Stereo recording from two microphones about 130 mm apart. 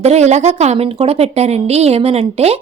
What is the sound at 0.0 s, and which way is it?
A woman's voice, 60° right (ahead or behind).